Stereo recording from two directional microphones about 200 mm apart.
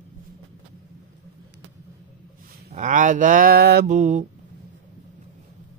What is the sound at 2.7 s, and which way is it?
Speech, 40° right (ahead or behind).